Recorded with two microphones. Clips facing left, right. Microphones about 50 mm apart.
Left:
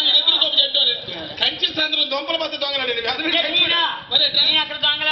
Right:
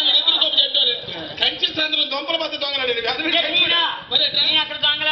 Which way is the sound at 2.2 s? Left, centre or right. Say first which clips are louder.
Even; centre.